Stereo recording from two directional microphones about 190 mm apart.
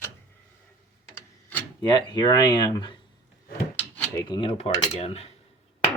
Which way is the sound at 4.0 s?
20° left (ahead or behind).